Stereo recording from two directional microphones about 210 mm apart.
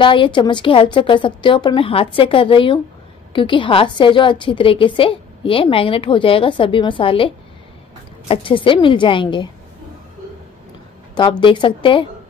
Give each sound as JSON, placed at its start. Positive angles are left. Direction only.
{"t": 0.0, "sound": "a woman's voice", "side_deg": 25}
{"t": 11.1, "sound": "a woman's voice", "side_deg": 20}